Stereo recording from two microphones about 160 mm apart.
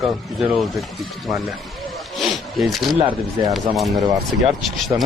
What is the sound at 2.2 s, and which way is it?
Rub, centre (ahead or behind).